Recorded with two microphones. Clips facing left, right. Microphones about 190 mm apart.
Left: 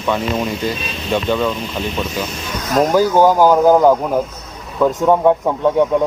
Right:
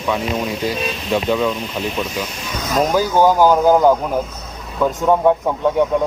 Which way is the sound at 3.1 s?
10° left (ahead or behind).